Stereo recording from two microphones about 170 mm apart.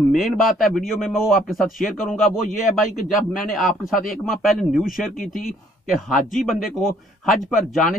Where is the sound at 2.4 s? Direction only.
45° left (ahead or behind).